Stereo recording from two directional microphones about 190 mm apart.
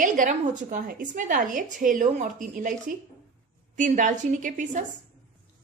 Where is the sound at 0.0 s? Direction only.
45° right (ahead or behind).